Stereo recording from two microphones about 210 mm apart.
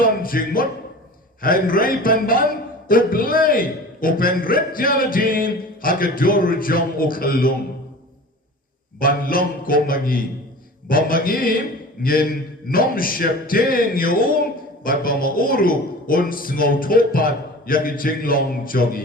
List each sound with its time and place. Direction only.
0.0 s speech: 40° left (ahead or behind)
9.0 s speech: 40° left (ahead or behind)